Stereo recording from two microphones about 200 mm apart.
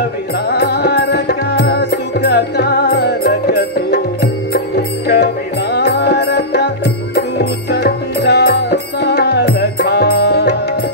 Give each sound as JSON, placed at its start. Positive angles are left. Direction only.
{"t": 0.5, "sound": "music", "side_deg": 55}